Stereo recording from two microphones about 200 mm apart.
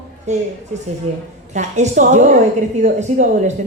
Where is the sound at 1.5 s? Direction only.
35° right (ahead or behind).